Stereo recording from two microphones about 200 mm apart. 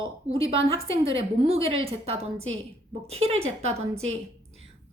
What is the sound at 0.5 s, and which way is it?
A woman's voice, 30° right (ahead or behind).